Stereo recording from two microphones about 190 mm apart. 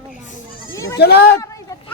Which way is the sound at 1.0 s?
55° left (ahead or behind).